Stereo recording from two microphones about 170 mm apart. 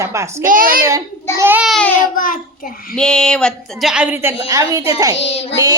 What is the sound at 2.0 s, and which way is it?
Speech, 55° left (ahead or behind).